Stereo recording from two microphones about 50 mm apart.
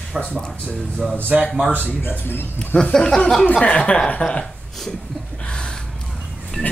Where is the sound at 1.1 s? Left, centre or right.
Right.